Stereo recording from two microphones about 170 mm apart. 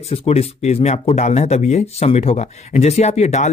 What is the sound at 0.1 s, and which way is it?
Speech, 40° left (ahead or behind).